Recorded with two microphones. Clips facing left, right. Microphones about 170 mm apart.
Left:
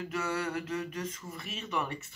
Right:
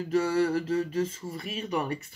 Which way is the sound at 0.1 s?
35° right (ahead or behind).